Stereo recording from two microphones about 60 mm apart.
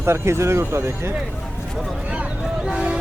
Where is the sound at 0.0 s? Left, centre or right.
Right.